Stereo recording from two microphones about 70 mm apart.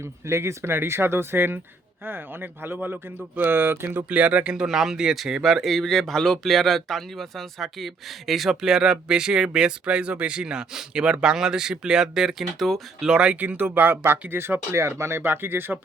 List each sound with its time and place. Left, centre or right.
0.0 s speech: right; by 4.5 s centre
4.5 s speech: centre
13.1 s speech: centre